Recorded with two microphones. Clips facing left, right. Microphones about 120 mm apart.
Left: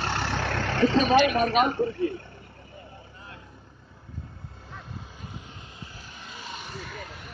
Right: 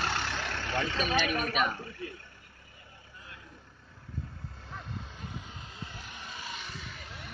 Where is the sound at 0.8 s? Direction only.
40° left (ahead or behind).